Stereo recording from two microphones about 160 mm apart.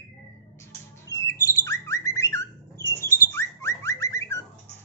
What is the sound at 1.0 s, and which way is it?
Bird, 20° left (ahead or behind).